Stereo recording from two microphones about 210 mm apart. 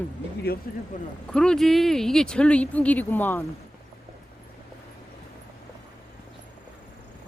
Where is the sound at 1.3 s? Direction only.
5° left (ahead or behind).